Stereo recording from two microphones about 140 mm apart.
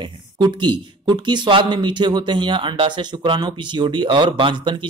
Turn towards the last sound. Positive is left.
turn(degrees=-35)  # may be behind; listen again after turning